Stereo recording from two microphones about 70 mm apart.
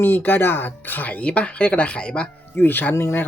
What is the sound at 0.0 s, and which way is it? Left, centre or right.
Speech, left.